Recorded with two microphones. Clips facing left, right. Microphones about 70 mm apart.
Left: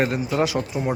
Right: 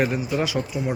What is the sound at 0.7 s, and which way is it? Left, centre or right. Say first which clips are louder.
Speech: left 3 dB; left.